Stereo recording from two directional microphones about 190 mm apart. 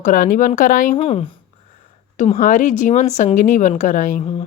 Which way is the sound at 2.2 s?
40° left (ahead or behind).